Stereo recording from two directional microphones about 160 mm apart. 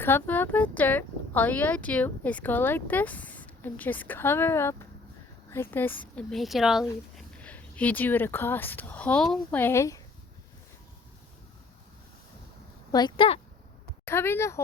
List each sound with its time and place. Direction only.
0.0 s speech: 10° left (ahead or behind)
6.3 s speech: centre (ahead or behind)
7.2 s speech: 10° left (ahead or behind)
12.9 s speech: 25° left (ahead or behind)
14.0 s speech: 15° left (ahead or behind)